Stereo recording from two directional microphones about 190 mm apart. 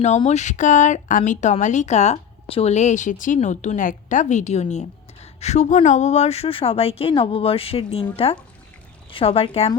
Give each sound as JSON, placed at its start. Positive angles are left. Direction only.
{"t": 0.3, "sound": "speech", "side_deg": 40}